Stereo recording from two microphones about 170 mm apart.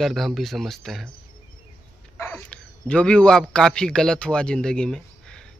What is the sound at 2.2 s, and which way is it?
A man's voice, 10° left (ahead or behind).